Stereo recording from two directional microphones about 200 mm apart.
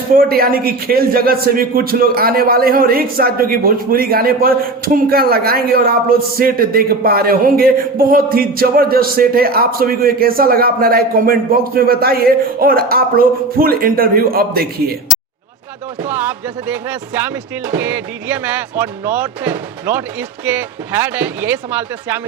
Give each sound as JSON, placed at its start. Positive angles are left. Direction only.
{"t": 0.2, "sound": "speech", "side_deg": -50}
{"t": 16.0, "sound": "speech", "side_deg": -10}